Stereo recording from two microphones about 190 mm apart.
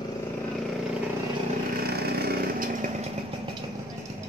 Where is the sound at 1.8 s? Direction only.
55° right (ahead or behind).